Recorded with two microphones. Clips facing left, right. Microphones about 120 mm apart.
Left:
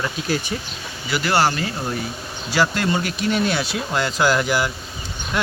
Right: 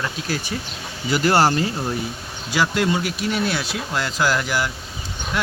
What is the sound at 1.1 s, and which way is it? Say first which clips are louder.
Speech: right 2 dB; 40° right (ahead or behind).